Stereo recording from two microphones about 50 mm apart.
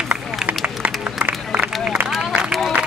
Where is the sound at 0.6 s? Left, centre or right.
Right.